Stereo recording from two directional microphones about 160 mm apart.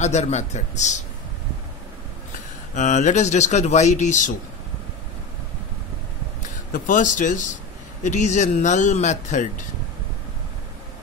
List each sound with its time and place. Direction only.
0.0 s a man's voice: 45° left (ahead or behind)
2.7 s a man's voice: 50° left (ahead or behind)
6.7 s a man's voice: 55° left (ahead or behind)